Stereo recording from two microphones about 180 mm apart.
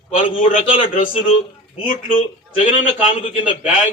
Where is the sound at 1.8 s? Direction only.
45° left (ahead or behind).